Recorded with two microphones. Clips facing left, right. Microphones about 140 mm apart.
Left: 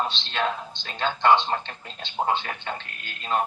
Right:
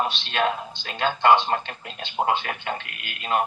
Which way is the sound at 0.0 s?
15° right (ahead or behind).